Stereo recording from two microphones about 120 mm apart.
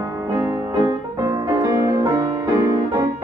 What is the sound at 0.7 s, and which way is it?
Music, 30° right (ahead or behind).